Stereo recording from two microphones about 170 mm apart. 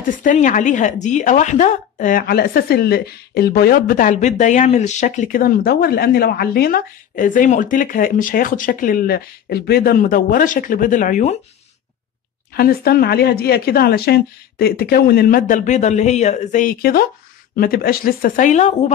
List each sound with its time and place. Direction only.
0.2 s speech: 50° left (ahead or behind)
12.5 s speech: 60° left (ahead or behind); by 18.8 s 45° left (ahead or behind)